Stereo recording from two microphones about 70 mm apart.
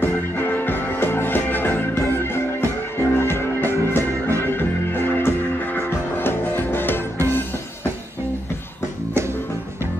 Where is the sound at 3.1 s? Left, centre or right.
Left.